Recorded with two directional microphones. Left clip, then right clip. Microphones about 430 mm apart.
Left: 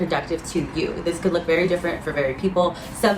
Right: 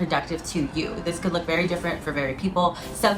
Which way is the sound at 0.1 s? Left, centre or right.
Centre.